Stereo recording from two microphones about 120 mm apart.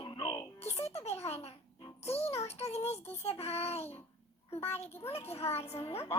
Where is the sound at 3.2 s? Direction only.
60° left (ahead or behind).